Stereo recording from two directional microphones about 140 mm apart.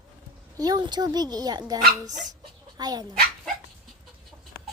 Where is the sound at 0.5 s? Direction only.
25° right (ahead or behind).